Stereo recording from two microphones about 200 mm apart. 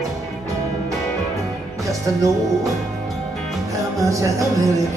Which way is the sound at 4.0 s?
15° right (ahead or behind).